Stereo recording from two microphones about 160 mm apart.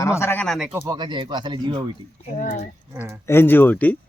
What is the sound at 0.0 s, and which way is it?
Speech, 15° left (ahead or behind).